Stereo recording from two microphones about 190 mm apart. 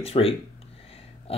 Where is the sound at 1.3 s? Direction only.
30° left (ahead or behind).